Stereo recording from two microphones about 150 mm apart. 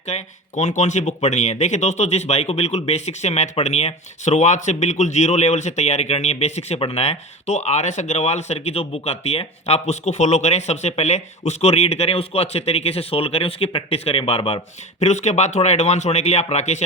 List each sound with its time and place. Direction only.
0.1 s speech: 55° left (ahead or behind)